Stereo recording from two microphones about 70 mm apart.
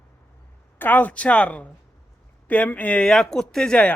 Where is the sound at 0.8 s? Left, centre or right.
Left.